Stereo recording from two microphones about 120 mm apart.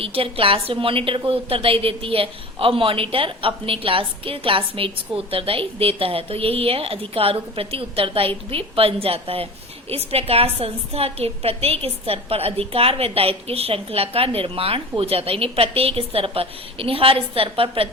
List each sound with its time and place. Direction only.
0.0 s a woman's voice: 50° right (ahead or behind)